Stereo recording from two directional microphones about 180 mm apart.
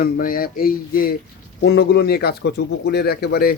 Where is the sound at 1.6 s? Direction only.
70° left (ahead or behind).